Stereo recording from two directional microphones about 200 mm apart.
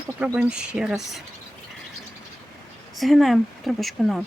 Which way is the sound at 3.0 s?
Centre (ahead or behind).